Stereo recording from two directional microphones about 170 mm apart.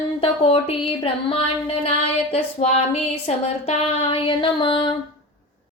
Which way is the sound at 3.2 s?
40° left (ahead or behind).